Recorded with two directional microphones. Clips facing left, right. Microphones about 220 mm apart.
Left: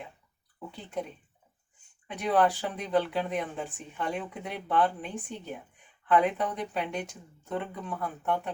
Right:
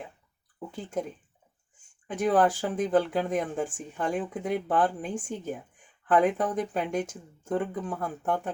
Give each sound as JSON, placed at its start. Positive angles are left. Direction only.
{"t": 0.7, "sound": "speech", "side_deg": -45}
{"t": 2.0, "sound": "speech", "side_deg": -45}